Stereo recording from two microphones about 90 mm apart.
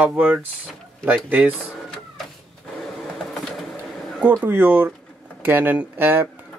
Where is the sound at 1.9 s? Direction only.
5° left (ahead or behind).